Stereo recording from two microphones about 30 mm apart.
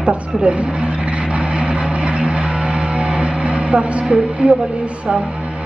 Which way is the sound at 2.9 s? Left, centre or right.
Right.